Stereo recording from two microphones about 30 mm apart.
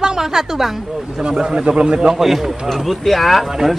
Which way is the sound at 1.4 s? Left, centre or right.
Right.